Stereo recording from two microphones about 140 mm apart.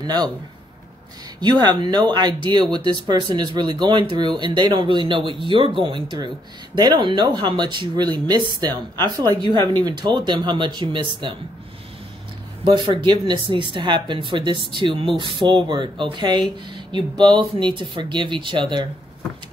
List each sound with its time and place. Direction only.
0.0 s a man's voice: 30° right (ahead or behind)
1.4 s speech: 30° right (ahead or behind)
12.7 s speech: 35° right (ahead or behind)